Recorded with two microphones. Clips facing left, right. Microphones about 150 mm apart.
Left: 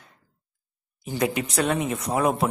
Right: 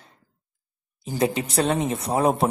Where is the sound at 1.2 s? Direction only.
30° right (ahead or behind).